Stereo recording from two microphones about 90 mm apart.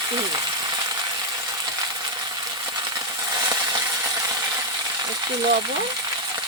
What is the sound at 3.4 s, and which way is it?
Coin, 45° right (ahead or behind).